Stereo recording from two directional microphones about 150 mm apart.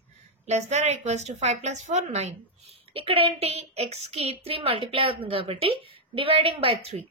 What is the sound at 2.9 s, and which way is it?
A woman's voice, 35° right (ahead or behind).